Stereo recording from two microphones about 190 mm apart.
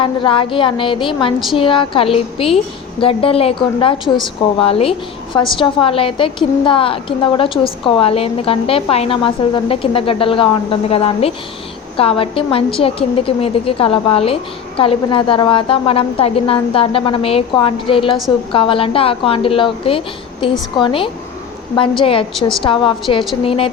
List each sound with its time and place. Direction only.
0.0 s a woman's voice: 25° left (ahead or behind)